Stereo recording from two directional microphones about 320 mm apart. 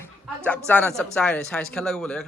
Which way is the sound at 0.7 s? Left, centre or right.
Centre.